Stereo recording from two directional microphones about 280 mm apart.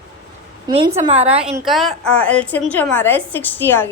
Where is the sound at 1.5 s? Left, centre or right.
Centre.